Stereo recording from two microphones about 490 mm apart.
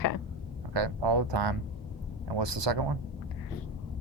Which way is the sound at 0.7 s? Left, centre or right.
Right.